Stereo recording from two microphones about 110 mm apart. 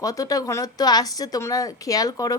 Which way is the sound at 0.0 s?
30° left (ahead or behind).